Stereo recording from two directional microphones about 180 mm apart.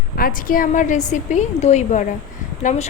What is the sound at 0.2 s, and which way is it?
A woman's voice, 50° left (ahead or behind).